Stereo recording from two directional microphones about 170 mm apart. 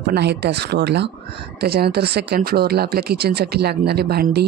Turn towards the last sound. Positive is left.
turn(degrees=-65)  # may be behind; listen again after turning